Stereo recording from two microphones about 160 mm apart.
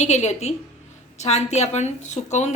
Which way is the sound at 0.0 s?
45° left (ahead or behind).